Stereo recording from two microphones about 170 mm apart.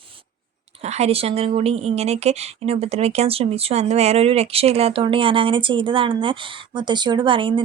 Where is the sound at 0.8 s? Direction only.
40° right (ahead or behind).